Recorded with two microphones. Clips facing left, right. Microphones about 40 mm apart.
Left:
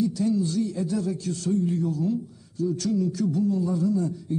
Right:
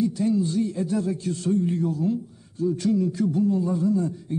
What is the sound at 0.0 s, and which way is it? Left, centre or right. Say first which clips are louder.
A man's voice: right 1 dB; right.